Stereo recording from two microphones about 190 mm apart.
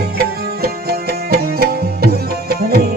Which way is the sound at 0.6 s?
55° right (ahead or behind).